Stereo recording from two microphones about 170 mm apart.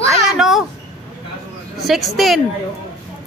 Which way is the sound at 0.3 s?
Centre (ahead or behind).